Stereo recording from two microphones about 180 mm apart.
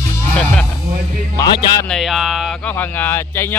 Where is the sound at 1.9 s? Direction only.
Centre (ahead or behind).